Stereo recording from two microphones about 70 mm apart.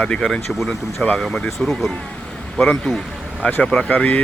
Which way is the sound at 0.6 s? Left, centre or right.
Centre.